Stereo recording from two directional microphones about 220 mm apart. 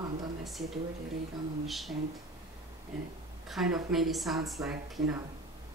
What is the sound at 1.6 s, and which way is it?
Speech, centre (ahead or behind).